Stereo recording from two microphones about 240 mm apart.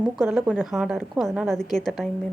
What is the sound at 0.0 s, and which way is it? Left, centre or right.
Speech, centre.